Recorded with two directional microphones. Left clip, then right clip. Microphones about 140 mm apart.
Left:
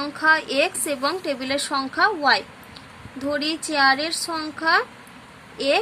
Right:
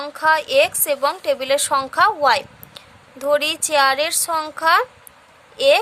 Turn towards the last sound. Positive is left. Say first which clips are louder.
# right 7 dB
turn(degrees=-55)  # may be behind; listen again after turning